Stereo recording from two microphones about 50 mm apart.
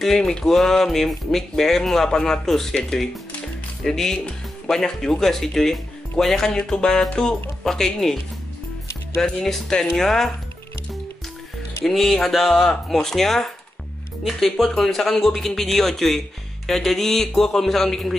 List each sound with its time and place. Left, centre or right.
0.2 s speech: centre
9.2 s speech: centre
11.8 s speech: centre